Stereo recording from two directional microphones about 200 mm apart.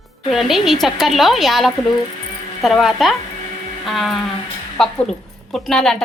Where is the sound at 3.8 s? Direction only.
Centre (ahead or behind).